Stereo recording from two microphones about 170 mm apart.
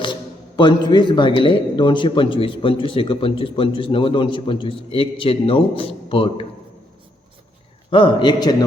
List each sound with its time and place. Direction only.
0.0 s a man's voice: 25° left (ahead or behind)
7.9 s a man's voice: 30° left (ahead or behind)